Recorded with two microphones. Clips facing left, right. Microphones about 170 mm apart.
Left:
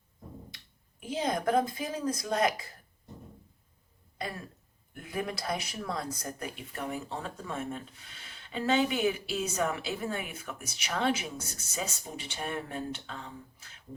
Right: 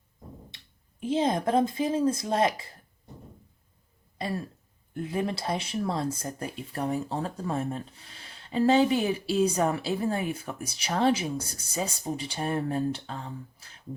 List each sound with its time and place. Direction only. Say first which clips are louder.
0.5 s speech: even; 25° right (ahead or behind)
4.9 s speech: right 6 dB; 30° right (ahead or behind)